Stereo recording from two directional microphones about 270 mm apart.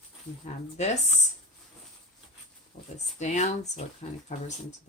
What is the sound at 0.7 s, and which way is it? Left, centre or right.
Speech, left.